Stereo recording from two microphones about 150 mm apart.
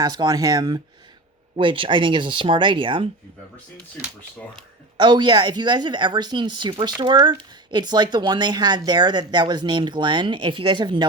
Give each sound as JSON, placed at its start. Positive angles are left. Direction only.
{"t": 0.0, "sound": "speech", "side_deg": -30}
{"t": 4.9, "sound": "speech", "side_deg": -30}